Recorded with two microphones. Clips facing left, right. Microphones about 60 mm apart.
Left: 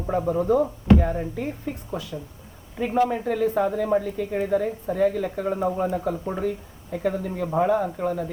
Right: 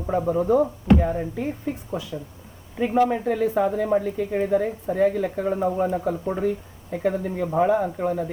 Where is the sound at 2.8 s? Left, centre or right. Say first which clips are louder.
Right 2 dB; centre.